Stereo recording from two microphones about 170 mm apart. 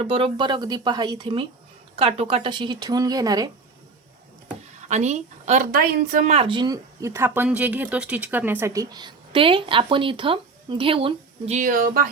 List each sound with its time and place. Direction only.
0.0 s speech: 35° right (ahead or behind)
4.9 s a woman's voice: 40° right (ahead or behind)
5.7 s speech: 55° right (ahead or behind)
6.3 s speech: 30° right (ahead or behind); by 12.1 s 55° right (ahead or behind)